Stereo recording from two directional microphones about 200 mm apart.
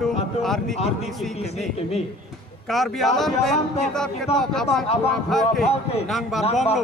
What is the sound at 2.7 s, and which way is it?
A man's voice, centre (ahead or behind).